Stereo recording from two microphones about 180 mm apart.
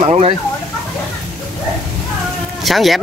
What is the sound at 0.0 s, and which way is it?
Speech, 35° right (ahead or behind).